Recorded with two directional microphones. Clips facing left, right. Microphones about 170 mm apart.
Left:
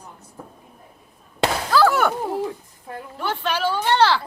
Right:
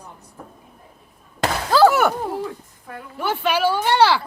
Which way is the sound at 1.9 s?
5° right (ahead or behind).